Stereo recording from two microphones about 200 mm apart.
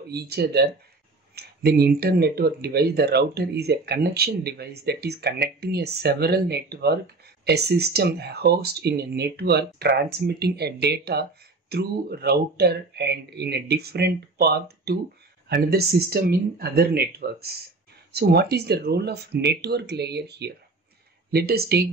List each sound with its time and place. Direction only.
0.1 s speech: 55° right (ahead or behind)